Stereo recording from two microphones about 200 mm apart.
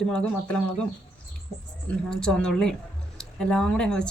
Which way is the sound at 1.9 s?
5° left (ahead or behind).